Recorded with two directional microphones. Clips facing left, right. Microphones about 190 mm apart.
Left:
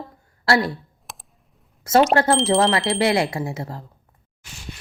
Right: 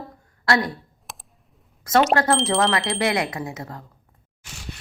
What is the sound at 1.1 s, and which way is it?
Computer keyboard, centre (ahead or behind).